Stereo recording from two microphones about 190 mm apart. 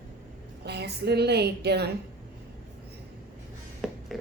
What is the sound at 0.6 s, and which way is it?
A woman's voice, 60° right (ahead or behind).